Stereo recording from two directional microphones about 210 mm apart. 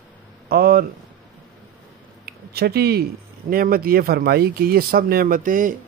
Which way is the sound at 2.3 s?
50° right (ahead or behind).